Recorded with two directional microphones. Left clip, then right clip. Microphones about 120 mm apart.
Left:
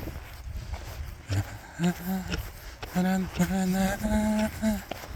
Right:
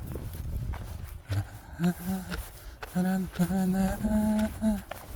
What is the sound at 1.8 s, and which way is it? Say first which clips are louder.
Speech: left 2 dB; 30° right (ahead or behind).